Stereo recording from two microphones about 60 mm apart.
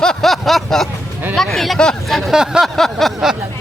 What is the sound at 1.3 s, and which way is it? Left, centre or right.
Speech, centre.